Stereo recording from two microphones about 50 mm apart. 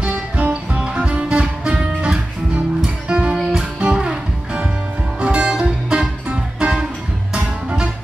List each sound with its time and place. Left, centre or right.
0.0 s music: right
3.3 s music: centre
3.9 s music: centre